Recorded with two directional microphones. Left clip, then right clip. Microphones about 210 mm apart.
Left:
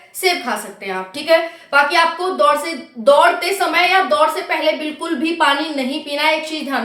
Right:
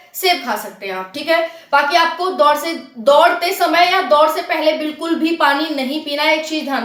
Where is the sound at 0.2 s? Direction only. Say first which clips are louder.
Right 1 dB; 10° left (ahead or behind).